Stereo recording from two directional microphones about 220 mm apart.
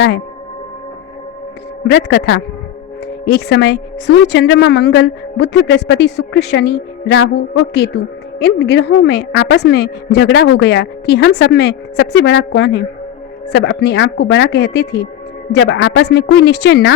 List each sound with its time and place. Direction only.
1.8 s a woman's voice: 50° left (ahead or behind)
7.3 s a woman's voice: 70° left (ahead or behind)
8.4 s a woman's voice: 50° left (ahead or behind)